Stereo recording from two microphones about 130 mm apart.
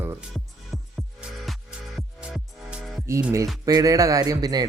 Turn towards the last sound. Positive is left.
turn(degrees=-30)  # may be behind; listen again after turning